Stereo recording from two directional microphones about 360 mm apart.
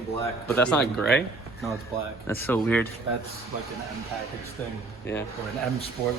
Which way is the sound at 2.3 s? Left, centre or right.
Centre.